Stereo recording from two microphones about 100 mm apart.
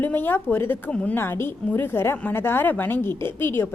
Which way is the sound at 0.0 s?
20° left (ahead or behind).